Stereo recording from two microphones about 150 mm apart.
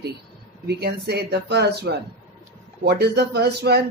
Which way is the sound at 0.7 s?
90° right.